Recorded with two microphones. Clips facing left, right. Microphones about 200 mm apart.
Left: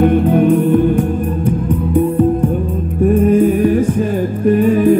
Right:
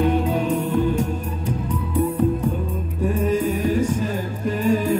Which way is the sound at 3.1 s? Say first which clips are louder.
Left 10 dB; 55° left (ahead or behind).